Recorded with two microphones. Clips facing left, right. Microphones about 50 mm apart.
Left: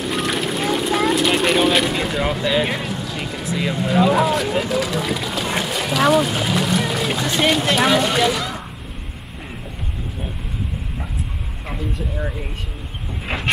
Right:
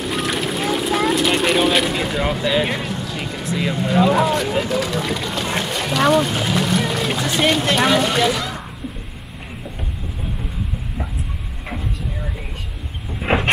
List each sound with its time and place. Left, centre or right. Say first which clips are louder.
0.0 s speech: even; centre
13.2 s vehicle: right 8 dB; right